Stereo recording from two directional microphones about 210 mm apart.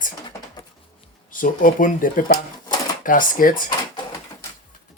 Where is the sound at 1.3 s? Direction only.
40° left (ahead or behind).